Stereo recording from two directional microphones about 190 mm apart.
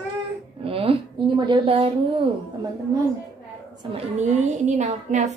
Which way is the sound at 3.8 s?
25° right (ahead or behind).